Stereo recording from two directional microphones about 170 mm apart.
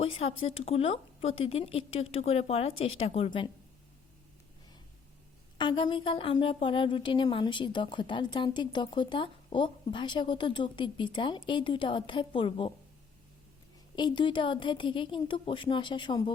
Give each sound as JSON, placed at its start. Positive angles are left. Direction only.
{"t": 0.0, "sound": "speech", "side_deg": 35}
{"t": 5.5, "sound": "a woman's voice", "side_deg": 30}
{"t": 13.9, "sound": "a woman's voice", "side_deg": 25}